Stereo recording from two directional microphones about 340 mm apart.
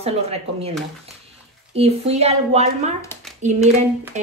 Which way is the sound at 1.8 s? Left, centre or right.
Centre.